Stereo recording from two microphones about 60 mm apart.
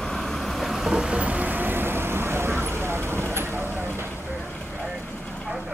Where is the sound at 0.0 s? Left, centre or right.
Centre; by 4.1 s right.